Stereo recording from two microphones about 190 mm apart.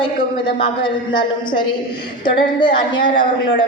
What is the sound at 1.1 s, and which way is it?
A woman's voice, 25° left (ahead or behind).